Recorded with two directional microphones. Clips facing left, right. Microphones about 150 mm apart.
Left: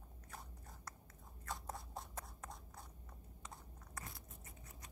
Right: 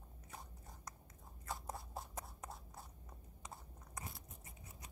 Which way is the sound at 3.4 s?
15° right (ahead or behind).